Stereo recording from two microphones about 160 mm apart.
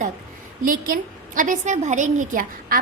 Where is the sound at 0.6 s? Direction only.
60° right (ahead or behind).